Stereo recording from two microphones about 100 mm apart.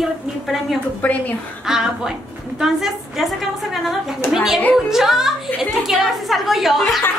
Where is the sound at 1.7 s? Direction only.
5° right (ahead or behind).